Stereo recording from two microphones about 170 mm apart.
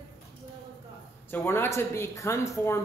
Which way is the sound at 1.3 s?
15° left (ahead or behind).